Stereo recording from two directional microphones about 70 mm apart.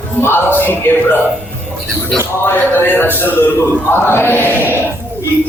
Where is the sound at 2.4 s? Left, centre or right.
Left.